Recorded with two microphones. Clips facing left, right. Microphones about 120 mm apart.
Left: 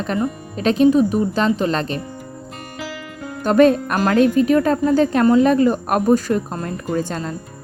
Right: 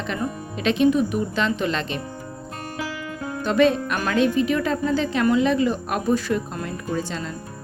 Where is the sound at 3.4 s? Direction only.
45° left (ahead or behind).